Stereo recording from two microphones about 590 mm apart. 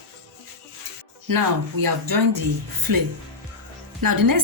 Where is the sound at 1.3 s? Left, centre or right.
Right.